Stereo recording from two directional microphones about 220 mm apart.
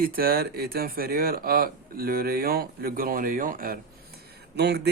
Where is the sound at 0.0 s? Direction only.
40° right (ahead or behind).